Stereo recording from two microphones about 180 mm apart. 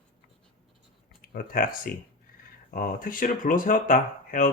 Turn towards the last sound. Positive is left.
turn(degrees=50)  # may be behind; listen again after turning